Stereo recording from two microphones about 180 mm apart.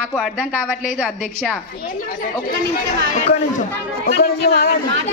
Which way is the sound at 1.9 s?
50° left (ahead or behind).